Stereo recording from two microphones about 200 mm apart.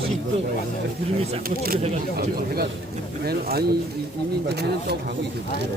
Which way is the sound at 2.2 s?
50° right (ahead or behind).